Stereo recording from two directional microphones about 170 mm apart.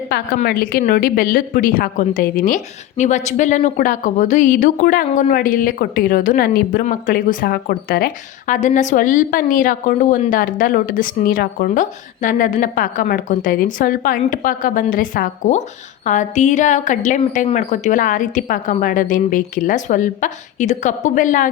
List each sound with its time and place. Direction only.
0.1 s a woman's voice: 60° left (ahead or behind)
3.0 s a woman's voice: 45° left (ahead or behind)